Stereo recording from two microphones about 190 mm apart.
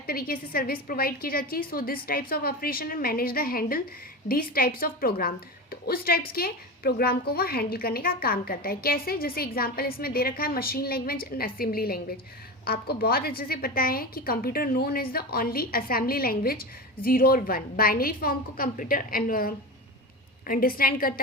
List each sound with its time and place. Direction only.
0.1 s a woman's voice: 50° left (ahead or behind)